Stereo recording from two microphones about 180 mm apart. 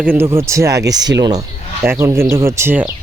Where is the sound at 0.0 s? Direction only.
10° right (ahead or behind).